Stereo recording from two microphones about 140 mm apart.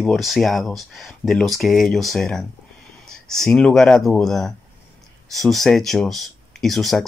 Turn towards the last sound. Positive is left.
turn(degrees=0)  # may be behind; listen again after turning